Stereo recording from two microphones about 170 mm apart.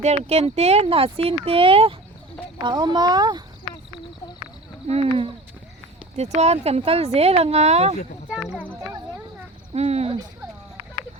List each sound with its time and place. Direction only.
0.0 s a child's voice: 40° right (ahead or behind)
4.9 s speech: 35° right (ahead or behind)
8.3 s speech: 5° right (ahead or behind)
9.7 s speech: 40° right (ahead or behind)